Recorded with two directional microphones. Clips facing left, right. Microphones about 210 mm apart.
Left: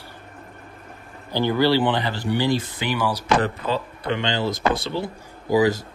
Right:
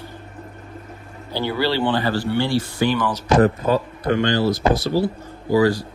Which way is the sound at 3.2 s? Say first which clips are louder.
Right 10 dB; 40° right (ahead or behind).